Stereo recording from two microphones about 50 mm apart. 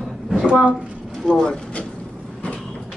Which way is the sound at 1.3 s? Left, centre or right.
Centre.